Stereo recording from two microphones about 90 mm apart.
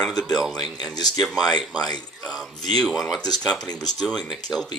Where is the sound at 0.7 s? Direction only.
45° left (ahead or behind).